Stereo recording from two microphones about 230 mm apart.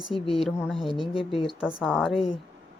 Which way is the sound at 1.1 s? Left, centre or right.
Left.